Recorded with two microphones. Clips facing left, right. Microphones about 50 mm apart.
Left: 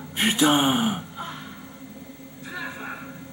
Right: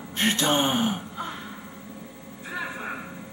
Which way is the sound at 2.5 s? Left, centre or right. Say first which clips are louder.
Right 1 dB; centre.